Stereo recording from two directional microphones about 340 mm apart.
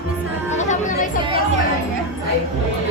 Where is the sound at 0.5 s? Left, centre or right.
Left.